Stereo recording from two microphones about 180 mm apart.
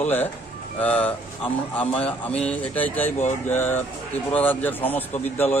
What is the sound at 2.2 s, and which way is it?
Speech, 5° left (ahead or behind).